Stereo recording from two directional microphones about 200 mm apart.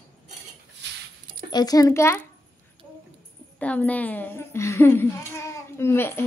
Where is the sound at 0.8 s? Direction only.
60° right (ahead or behind).